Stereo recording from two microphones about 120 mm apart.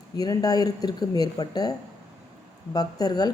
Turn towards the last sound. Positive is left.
turn(degrees=35)  # may be behind; listen again after turning